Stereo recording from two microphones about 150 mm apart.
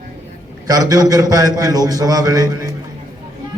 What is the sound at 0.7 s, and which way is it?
A man's voice, 25° right (ahead or behind).